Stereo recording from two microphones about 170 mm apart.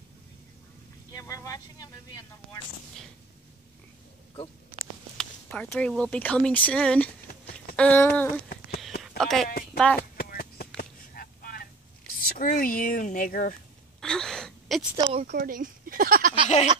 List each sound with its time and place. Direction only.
1.1 s speech: 20° left (ahead or behind)
5.1 s speech: 5° left (ahead or behind)
10.1 s a sound: 65° left (ahead or behind)
12.1 s speech: 55° left (ahead or behind)
14.0 s wail: 5° left (ahead or behind)
15.0 s speech: 35° right (ahead or behind)
15.3 s speech: 55° right (ahead or behind)
16.4 s a sound: 45° left (ahead or behind)